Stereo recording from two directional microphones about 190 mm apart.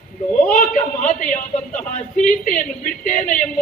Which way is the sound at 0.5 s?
45° left (ahead or behind).